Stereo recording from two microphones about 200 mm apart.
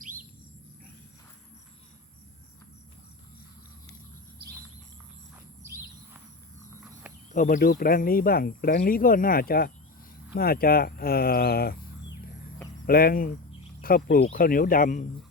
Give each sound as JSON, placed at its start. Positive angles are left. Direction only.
{"t": 7.3, "sound": "speech", "side_deg": 45}
{"t": 12.8, "sound": "speech", "side_deg": 50}